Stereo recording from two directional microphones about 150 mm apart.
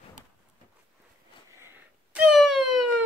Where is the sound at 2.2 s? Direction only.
5° right (ahead or behind).